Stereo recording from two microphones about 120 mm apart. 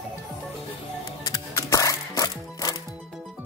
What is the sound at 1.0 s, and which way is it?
Music, 30° left (ahead or behind).